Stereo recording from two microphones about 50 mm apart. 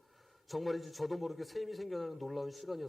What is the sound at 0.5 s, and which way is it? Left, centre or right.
A man's voice, centre.